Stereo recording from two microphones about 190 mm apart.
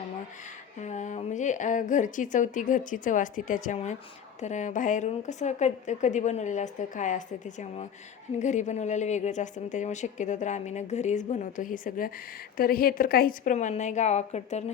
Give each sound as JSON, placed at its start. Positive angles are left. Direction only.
{"t": 0.8, "sound": "a woman's voice", "side_deg": 40}